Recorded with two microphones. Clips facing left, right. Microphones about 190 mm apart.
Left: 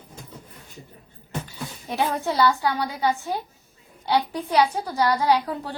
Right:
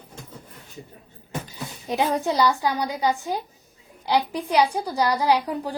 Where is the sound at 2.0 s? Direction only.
15° right (ahead or behind).